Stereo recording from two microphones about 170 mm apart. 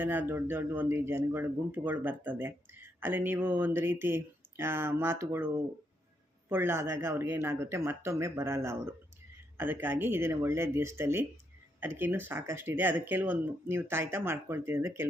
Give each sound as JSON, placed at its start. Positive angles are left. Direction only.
{"t": 0.0, "sound": "speech", "side_deg": -10}
{"t": 6.5, "sound": "speech", "side_deg": -15}